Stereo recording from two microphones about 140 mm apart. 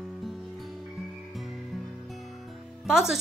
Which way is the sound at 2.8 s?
5° right (ahead or behind).